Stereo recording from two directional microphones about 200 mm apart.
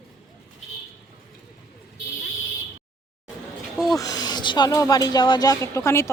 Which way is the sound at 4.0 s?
20° left (ahead or behind).